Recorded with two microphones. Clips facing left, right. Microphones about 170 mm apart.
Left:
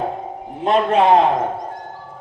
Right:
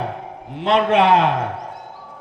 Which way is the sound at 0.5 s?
80° right.